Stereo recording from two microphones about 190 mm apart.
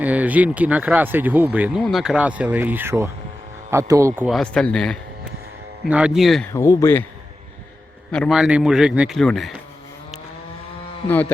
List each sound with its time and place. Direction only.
0.0 s speech: 10° right (ahead or behind)
4.3 s a man's voice: 5° left (ahead or behind)
6.5 s speech: 15° left (ahead or behind)
8.1 s a man's voice: centre (ahead or behind)